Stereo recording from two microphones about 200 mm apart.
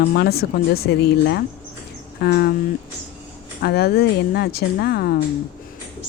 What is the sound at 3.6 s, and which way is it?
Speech, 50° left (ahead or behind).